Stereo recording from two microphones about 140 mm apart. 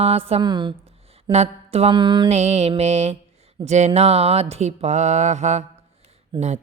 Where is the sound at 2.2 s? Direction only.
50° right (ahead or behind).